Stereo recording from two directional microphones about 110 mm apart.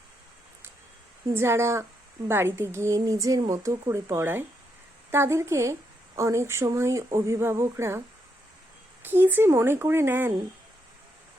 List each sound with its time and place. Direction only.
1.3 s a woman's voice: 25° right (ahead or behind)
9.0 s a woman's voice: 20° right (ahead or behind)